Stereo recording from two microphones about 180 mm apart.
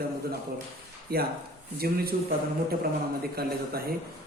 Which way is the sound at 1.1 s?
55° right (ahead or behind).